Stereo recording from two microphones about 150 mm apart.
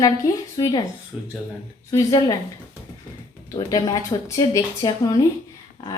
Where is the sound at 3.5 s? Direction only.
25° left (ahead or behind).